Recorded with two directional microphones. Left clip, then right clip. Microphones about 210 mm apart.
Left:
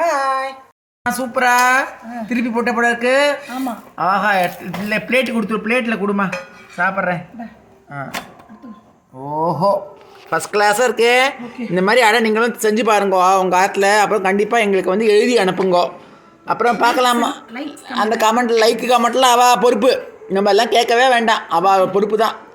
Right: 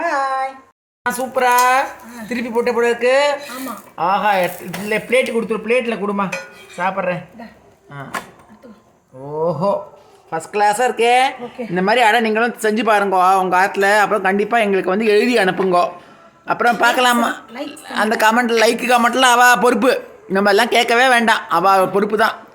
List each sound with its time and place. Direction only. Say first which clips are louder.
0.1 s a sound: left 1 dB; 5° right (ahead or behind)
1.0 s speech: even; 5° right (ahead or behind)
10.2 s a woman's voice: left 1 dB; 15° left (ahead or behind); by 22.4 s 15° right (ahead or behind)